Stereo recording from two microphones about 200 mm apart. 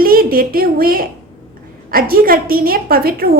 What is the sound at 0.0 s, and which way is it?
A woman's voice, 45° right (ahead or behind).